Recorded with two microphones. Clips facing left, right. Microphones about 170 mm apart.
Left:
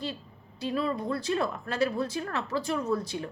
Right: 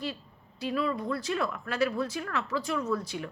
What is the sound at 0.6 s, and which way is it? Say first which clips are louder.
A woman's voice: even; 30° left (ahead or behind).